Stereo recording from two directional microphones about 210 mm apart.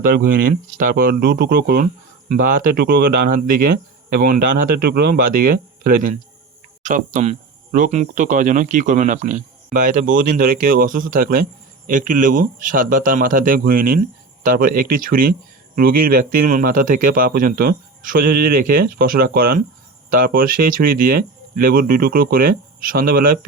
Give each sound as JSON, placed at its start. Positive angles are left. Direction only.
{"t": 0.8, "sound": "speech", "side_deg": -40}